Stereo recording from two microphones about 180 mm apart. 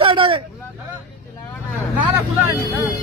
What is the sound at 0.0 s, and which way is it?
Vehicle, 30° right (ahead or behind).